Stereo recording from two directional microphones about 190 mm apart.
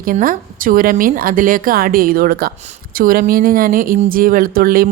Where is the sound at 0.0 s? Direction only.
45° right (ahead or behind).